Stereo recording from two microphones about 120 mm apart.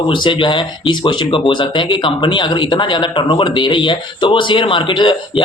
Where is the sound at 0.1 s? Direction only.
45° left (ahead or behind).